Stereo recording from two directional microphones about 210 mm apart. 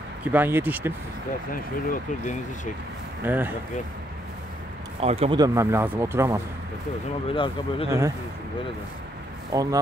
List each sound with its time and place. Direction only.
0.2 s speech: 10° right (ahead or behind)
1.5 s speech: 40° left (ahead or behind)
3.2 s speech: 10° right (ahead or behind)
5.0 s speech: 30° right (ahead or behind); by 6.4 s 10° right (ahead or behind)
7.2 s speech: 25° left (ahead or behind)
9.5 s speech: 15° right (ahead or behind)